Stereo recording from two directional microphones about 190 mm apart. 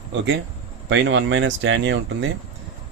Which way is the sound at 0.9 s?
80° right.